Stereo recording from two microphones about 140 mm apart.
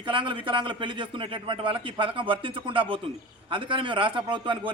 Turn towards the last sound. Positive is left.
turn(degrees=-35)  # may be behind; listen again after turning